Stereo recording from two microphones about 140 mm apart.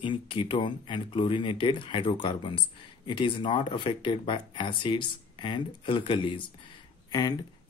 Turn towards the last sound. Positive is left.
turn(degrees=30)  # may be behind; listen again after turning